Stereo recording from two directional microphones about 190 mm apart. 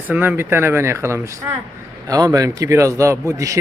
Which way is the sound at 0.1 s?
10° right (ahead or behind).